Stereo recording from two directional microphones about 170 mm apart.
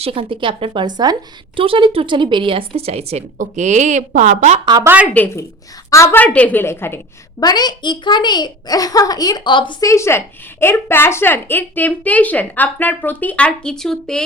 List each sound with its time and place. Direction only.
0.0 s a woman's voice: 30° right (ahead or behind)
4.6 s a woman's voice: 25° right (ahead or behind)
5.1 s a woman's voice: 15° left (ahead or behind)
7.4 s a child's voice: 25° left (ahead or behind)
9.9 s a woman's voice: 15° left (ahead or behind)